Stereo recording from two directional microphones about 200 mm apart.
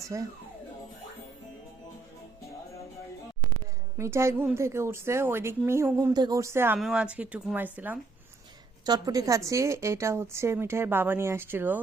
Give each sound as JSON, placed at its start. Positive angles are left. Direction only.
{"t": 0.0, "sound": "speech", "side_deg": -15}
{"t": 3.9, "sound": "a woman's voice", "side_deg": -15}